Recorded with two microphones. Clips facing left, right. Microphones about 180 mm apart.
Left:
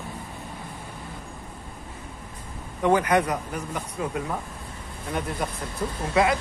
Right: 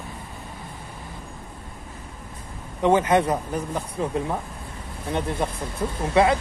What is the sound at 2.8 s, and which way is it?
Speech, 25° right (ahead or behind).